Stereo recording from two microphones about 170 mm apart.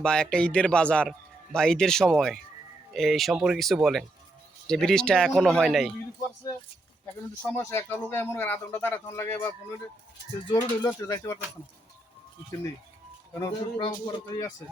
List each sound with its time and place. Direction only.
0.0 s a man's voice: 5° left (ahead or behind)
7.5 s speech: 15° left (ahead or behind)
13.4 s speech: 20° left (ahead or behind)